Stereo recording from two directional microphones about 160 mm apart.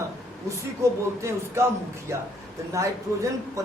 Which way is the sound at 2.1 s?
20° right (ahead or behind).